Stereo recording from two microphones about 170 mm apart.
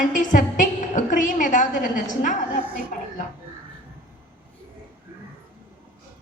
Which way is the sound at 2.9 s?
55° left (ahead or behind).